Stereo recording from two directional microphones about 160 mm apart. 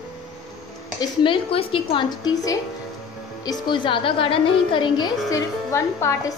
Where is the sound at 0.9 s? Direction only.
30° left (ahead or behind).